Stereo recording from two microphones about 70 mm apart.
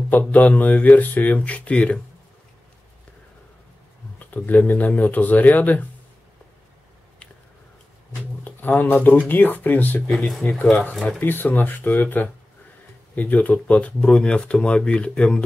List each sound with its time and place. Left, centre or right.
0.3 s speech: left
4.2 s speech: left
8.5 s a sound: left
9.3 s speech: left
10.0 s speech: centre